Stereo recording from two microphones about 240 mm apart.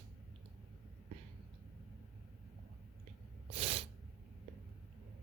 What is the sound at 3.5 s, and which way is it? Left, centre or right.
Sneeze, right.